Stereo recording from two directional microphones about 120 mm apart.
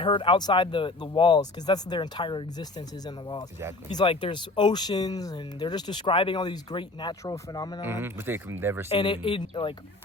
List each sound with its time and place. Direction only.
0.0 s speech: 45° left (ahead or behind)
3.8 s speech: 45° left (ahead or behind)
7.9 s speech: 20° right (ahead or behind)
8.9 s speech: 45° left (ahead or behind)